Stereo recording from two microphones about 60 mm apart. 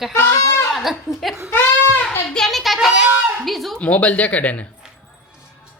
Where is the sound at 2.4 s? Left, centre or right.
Centre.